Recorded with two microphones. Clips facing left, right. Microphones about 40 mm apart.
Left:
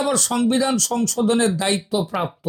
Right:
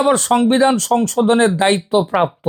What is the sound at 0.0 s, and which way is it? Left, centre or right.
Speech, right.